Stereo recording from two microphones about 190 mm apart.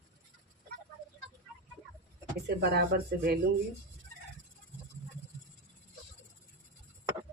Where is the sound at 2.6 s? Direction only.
55° right (ahead or behind).